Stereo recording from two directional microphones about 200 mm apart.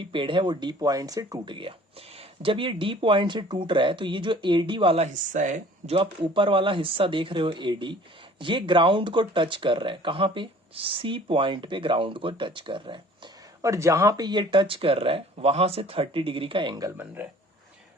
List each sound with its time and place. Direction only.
0.0 s speech: 25° right (ahead or behind)
13.6 s speech: 15° right (ahead or behind)
17.2 s speech: 10° right (ahead or behind)